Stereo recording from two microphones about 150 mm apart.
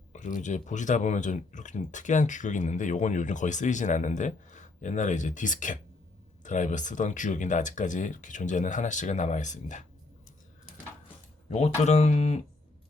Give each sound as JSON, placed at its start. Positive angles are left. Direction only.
{"t": 0.1, "sound": "speech", "side_deg": 55}
{"t": 11.4, "sound": "speech", "side_deg": 45}